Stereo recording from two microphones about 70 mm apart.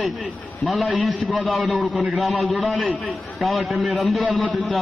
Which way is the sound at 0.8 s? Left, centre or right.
Centre.